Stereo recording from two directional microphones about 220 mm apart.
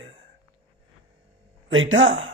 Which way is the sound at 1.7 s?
60° right (ahead or behind).